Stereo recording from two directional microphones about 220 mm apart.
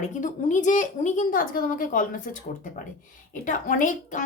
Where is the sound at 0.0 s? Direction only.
35° left (ahead or behind).